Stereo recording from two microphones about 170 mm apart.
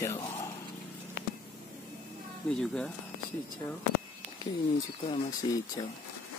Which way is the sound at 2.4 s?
5° left (ahead or behind).